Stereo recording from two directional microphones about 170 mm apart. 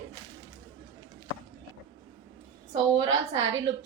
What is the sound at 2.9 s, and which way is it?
Speech, 30° right (ahead or behind).